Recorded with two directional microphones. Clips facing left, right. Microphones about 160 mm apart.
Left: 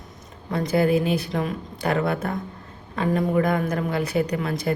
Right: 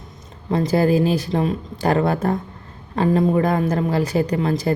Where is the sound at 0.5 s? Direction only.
35° right (ahead or behind).